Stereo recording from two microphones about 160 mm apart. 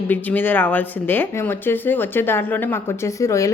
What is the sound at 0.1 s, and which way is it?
Speech, 10° left (ahead or behind).